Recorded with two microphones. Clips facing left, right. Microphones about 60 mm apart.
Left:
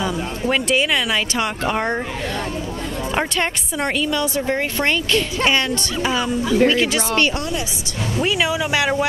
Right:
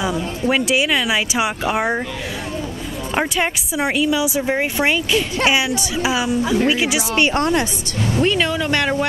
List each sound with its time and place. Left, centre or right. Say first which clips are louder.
0.0 s speech: right 2 dB; centre
3.2 s speech: right 3 dB; centre
7.3 s a woman's voice: right 7 dB; right
8.2 s speech: right 1 dB; centre